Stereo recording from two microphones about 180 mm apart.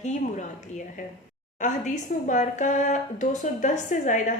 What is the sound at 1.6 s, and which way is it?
A woman's voice, 45° left (ahead or behind).